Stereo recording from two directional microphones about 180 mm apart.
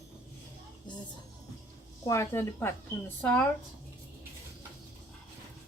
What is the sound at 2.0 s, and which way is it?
Speech, 15° left (ahead or behind).